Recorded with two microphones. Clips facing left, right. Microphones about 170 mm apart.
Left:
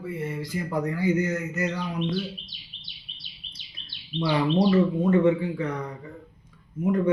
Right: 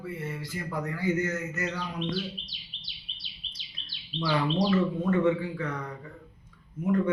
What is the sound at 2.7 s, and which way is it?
Bird, 50° left (ahead or behind).